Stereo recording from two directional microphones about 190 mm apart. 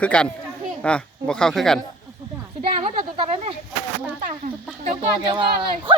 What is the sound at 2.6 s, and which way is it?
Speech, 35° right (ahead or behind).